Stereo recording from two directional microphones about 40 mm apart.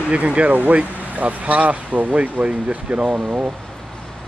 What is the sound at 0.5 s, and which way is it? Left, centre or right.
Speech, right.